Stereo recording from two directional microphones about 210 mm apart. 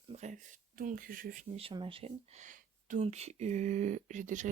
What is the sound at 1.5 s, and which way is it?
Speech, 25° right (ahead or behind).